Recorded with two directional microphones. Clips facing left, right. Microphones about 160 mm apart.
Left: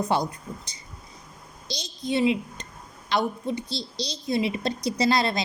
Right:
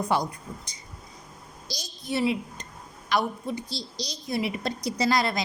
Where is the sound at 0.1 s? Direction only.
30° left (ahead or behind).